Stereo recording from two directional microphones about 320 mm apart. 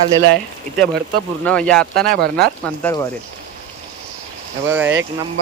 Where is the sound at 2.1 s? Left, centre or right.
Right.